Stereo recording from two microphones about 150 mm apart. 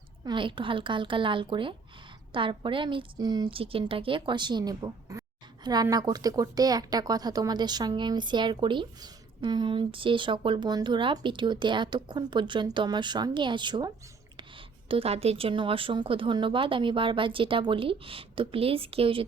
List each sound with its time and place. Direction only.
0.3 s speech: 35° right (ahead or behind)